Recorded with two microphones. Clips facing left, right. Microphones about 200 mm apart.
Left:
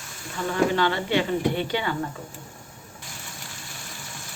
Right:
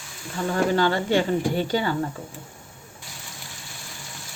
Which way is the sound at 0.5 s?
40° right (ahead or behind).